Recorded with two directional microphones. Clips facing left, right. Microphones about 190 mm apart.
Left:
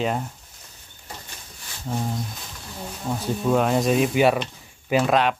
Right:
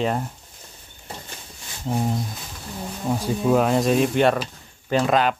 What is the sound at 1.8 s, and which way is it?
Speech, 20° right (ahead or behind).